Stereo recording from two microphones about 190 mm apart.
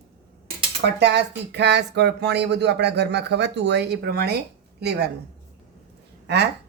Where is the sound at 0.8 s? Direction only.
65° right (ahead or behind).